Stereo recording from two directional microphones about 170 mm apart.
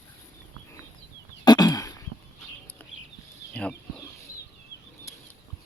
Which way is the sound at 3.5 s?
5° left (ahead or behind).